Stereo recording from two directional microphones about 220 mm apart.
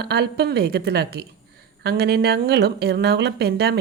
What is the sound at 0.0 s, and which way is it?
Speech, 50° right (ahead or behind).